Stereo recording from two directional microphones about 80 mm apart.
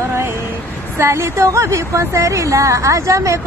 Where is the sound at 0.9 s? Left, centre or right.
Right.